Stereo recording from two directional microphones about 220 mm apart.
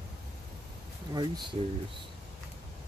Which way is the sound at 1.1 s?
20° right (ahead or behind).